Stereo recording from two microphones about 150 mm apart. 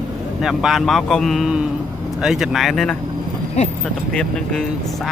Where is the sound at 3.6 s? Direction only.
50° left (ahead or behind).